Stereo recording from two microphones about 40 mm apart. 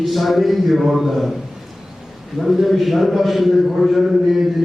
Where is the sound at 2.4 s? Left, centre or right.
Centre.